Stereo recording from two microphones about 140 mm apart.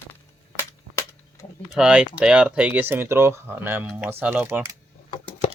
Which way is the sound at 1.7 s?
5° right (ahead or behind).